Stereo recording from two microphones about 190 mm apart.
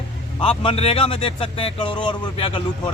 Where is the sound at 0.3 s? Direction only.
30° left (ahead or behind).